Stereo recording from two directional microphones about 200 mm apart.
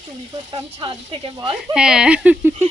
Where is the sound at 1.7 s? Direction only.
5° right (ahead or behind).